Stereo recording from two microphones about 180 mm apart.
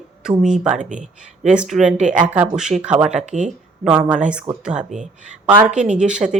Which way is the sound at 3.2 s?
40° right (ahead or behind).